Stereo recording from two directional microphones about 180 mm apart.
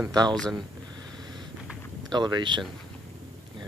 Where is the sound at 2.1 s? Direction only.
25° right (ahead or behind).